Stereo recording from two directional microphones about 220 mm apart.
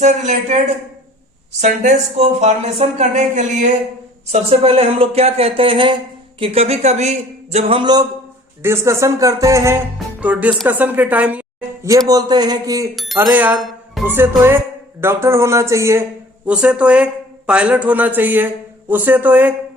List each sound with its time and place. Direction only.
0.0 s speech: 35° right (ahead or behind)
1.6 s speech: 35° right (ahead or behind); by 19.5 s 5° right (ahead or behind)